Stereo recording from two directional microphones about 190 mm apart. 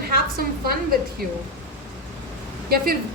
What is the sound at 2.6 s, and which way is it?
Speech, 55° right (ahead or behind).